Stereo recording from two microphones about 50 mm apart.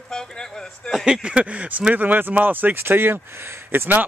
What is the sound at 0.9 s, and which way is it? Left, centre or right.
Speech, centre.